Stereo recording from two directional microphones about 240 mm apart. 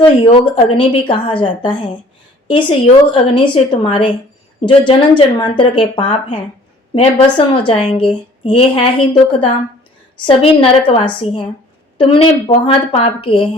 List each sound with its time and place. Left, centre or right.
0.0 s a woman's voice: left